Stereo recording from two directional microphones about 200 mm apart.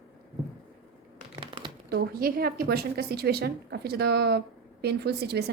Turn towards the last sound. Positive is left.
turn(degrees=-55)  # may be behind; listen again after turning